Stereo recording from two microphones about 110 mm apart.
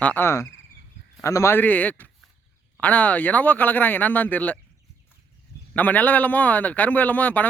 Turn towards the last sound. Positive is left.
turn(degrees=15)  # may be behind; listen again after turning